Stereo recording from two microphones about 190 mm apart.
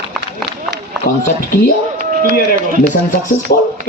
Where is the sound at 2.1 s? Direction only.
45° right (ahead or behind).